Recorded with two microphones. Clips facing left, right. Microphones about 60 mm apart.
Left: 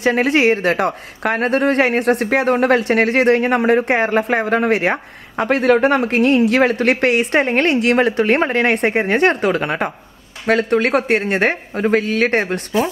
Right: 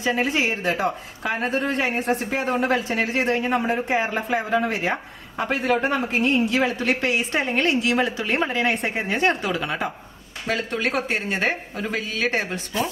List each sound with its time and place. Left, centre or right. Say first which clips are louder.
0.0 s a man's voice: left 8 dB; left